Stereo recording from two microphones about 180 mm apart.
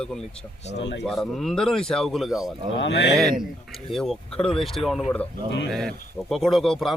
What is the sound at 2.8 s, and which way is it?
Speech, 75° left (ahead or behind).